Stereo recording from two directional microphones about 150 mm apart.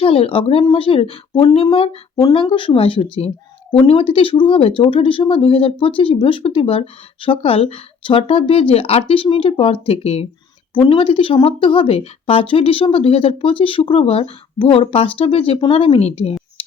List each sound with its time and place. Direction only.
0.0 s speech: 40° left (ahead or behind)
16.6 s music: 40° left (ahead or behind)